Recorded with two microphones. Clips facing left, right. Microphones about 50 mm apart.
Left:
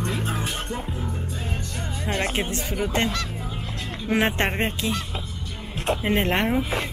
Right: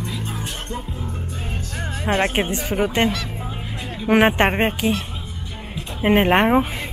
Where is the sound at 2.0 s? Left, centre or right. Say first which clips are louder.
Right 6 dB; right.